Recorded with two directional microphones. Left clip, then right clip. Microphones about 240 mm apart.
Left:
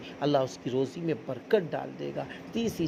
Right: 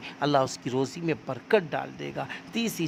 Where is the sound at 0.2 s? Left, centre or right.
Centre.